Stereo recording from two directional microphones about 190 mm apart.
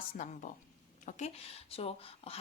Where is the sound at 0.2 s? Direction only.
40° left (ahead or behind).